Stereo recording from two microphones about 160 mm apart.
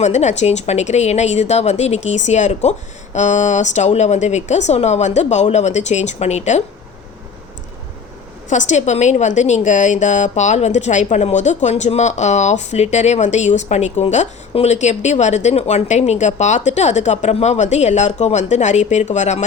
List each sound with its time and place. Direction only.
0.0 s a woman's voice: 45° left (ahead or behind)
8.4 s a woman's voice: 50° left (ahead or behind)